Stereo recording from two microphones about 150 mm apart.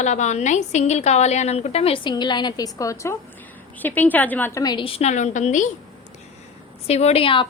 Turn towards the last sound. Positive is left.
turn(degrees=35)  # may be behind; listen again after turning